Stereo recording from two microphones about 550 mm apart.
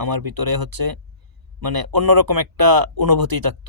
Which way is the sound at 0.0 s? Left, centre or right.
Right.